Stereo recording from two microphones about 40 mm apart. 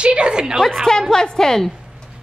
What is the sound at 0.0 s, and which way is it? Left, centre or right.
Speech, right.